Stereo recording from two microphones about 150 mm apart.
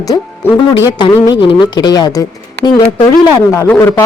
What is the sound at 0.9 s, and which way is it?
A woman's voice, 30° left (ahead or behind).